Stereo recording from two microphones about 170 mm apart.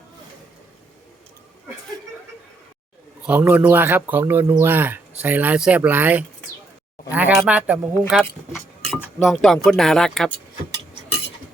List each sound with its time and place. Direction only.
3.2 s speech: 10° right (ahead or behind)